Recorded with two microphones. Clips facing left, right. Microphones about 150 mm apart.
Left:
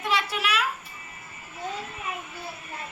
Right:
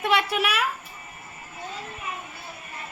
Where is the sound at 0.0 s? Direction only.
55° right (ahead or behind).